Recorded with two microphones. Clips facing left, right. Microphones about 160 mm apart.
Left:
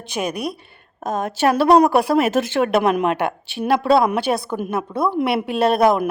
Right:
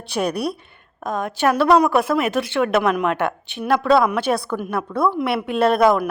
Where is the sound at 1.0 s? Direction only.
20° left (ahead or behind); by 2.6 s 40° left (ahead or behind).